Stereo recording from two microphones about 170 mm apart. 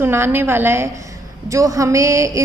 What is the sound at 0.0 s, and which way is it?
A woman's voice, 15° right (ahead or behind).